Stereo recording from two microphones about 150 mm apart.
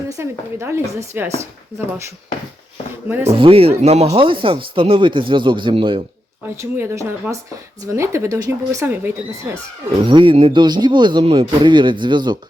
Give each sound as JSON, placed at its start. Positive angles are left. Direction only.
{"t": 0.1, "sound": "speech", "side_deg": -15}
{"t": 3.1, "sound": "speech", "side_deg": -15}
{"t": 3.3, "sound": "speech", "side_deg": -40}
{"t": 6.6, "sound": "speech", "side_deg": -20}
{"t": 10.0, "sound": "speech", "side_deg": -35}